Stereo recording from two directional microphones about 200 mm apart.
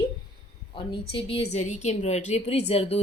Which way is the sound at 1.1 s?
30° left (ahead or behind).